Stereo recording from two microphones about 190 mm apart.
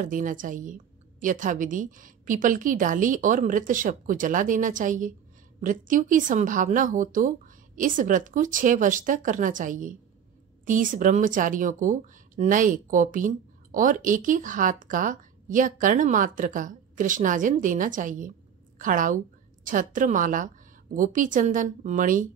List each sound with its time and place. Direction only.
0.0 s speech: 45° right (ahead or behind)